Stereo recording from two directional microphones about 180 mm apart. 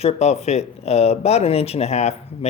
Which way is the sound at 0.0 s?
35° left (ahead or behind).